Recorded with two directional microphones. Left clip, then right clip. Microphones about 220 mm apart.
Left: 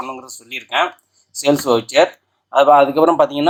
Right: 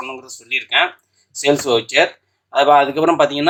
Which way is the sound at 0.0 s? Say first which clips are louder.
Left 1 dB; 40° left (ahead or behind).